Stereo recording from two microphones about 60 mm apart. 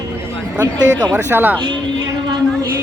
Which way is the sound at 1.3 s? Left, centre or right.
Right.